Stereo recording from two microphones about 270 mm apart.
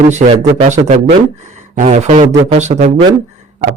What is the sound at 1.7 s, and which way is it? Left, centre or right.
Speech, right.